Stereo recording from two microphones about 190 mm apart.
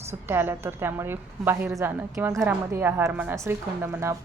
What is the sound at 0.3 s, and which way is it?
A woman's voice, 10° right (ahead or behind).